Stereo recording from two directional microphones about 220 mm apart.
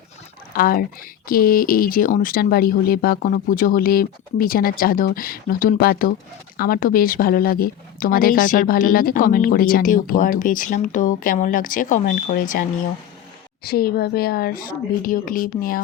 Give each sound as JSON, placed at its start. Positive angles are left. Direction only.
{"t": 0.5, "sound": "speech", "side_deg": 40}
{"t": 13.7, "sound": "a woman's voice", "side_deg": 45}